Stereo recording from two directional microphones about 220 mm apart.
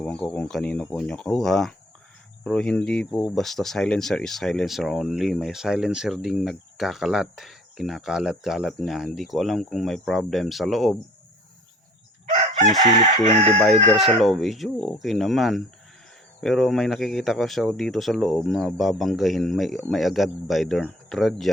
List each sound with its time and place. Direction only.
0.0 s speech: 5° left (ahead or behind)
12.2 s chicken: 25° right (ahead or behind)
13.7 s speech: centre (ahead or behind)